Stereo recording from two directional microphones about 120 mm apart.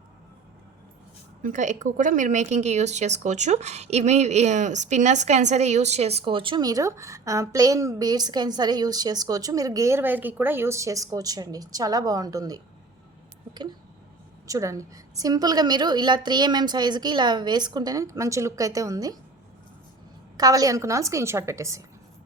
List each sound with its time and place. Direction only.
1.4 s a woman's voice: 90° right; by 19.1 s 30° right (ahead or behind)
20.3 s a woman's voice: 30° right (ahead or behind)